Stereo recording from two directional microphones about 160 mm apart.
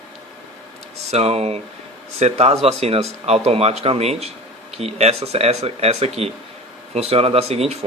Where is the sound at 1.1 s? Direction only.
40° right (ahead or behind).